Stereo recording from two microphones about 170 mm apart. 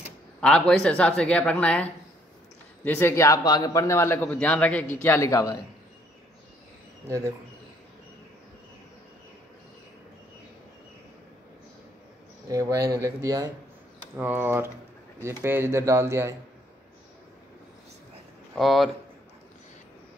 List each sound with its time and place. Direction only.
0.4 s a man's voice: 5° left (ahead or behind)
7.1 s speech: 15° right (ahead or behind)
12.4 s speech: 20° right (ahead or behind)
18.5 s speech: centre (ahead or behind)